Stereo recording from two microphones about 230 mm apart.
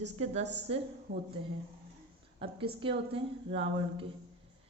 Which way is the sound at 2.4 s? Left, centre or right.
Right.